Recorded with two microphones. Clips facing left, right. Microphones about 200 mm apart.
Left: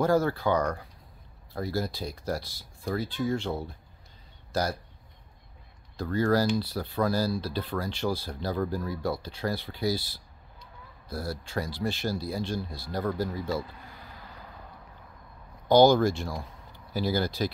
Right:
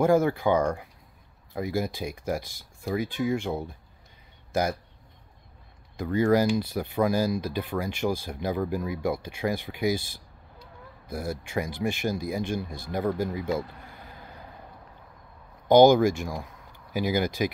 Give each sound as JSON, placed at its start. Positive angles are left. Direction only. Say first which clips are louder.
{"t": 0.0, "sound": "speech", "louder": "right 3 dB", "side_deg": -15}
{"t": 5.9, "sound": "speech", "louder": "right 3 dB", "side_deg": -15}
{"t": 11.1, "sound": "speech", "louder": "right 2 dB", "side_deg": -15}
{"t": 15.7, "sound": "speech", "louder": "right 3 dB", "side_deg": -15}